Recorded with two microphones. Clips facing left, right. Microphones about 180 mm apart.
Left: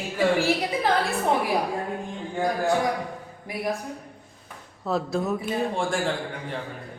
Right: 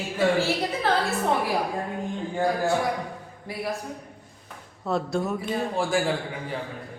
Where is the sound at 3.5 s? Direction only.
15° left (ahead or behind).